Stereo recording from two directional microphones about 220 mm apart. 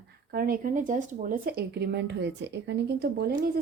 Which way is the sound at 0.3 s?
40° right (ahead or behind).